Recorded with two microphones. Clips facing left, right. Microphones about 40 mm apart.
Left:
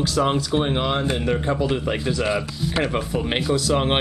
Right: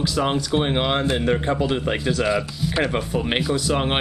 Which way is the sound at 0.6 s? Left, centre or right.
Centre.